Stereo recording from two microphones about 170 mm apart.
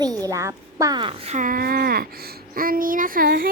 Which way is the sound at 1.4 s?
55° right (ahead or behind).